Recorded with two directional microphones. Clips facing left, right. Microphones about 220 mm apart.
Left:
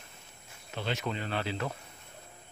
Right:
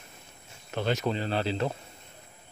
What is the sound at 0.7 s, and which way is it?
Speech, 45° right (ahead or behind).